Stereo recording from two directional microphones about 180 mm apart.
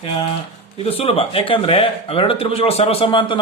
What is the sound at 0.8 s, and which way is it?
Speech, 35° left (ahead or behind).